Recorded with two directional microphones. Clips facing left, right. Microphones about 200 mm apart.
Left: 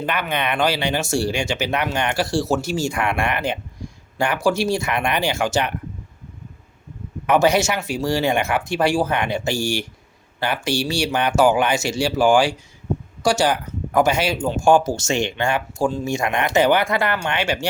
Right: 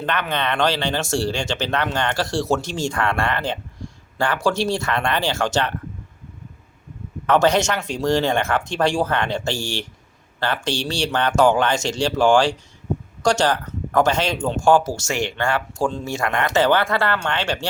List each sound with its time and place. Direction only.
0.0 s speech: 10° left (ahead or behind)
7.3 s speech: 10° left (ahead or behind)